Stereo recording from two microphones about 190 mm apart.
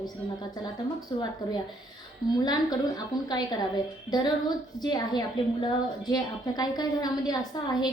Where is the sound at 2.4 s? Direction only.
20° left (ahead or behind).